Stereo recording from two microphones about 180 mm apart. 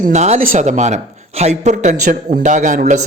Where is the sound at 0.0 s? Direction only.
40° right (ahead or behind).